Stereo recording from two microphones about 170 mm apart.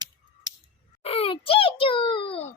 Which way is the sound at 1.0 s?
35° left (ahead or behind).